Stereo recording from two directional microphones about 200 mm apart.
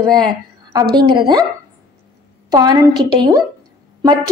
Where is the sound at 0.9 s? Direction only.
25° right (ahead or behind).